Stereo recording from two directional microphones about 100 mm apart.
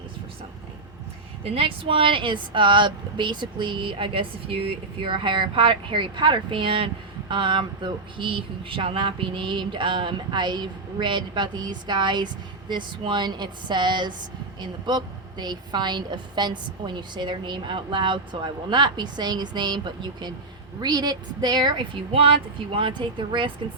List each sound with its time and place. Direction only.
1.5 s speech: 65° right (ahead or behind); by 21.8 s 50° right (ahead or behind)
22.1 s speech: 65° right (ahead or behind)